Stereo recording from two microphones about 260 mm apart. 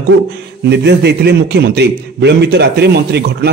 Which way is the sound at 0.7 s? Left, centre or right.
Right.